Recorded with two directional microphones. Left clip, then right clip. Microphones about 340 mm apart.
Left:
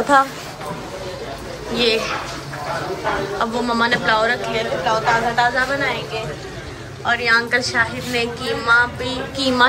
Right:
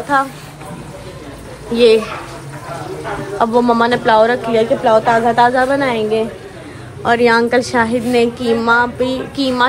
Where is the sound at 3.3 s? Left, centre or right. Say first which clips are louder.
Right 12 dB; centre.